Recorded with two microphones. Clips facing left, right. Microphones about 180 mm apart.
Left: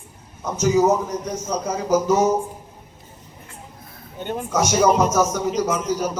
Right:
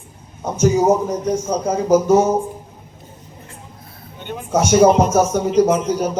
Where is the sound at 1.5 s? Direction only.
55° right (ahead or behind).